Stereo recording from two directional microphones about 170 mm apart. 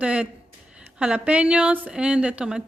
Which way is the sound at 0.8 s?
5° right (ahead or behind).